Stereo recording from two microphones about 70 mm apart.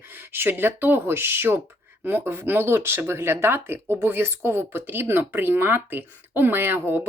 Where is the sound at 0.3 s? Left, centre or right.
Right.